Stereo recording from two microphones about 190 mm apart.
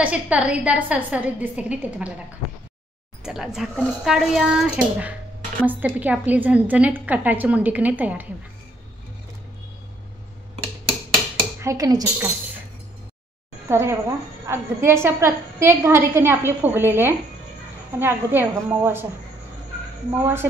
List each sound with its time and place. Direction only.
0.0 s a woman's voice: 5° right (ahead or behind)
3.3 s a woman's voice: centre (ahead or behind)
11.6 s a woman's voice: 20° right (ahead or behind)
13.7 s a woman's voice: 15° right (ahead or behind)
20.1 s a woman's voice: 10° right (ahead or behind)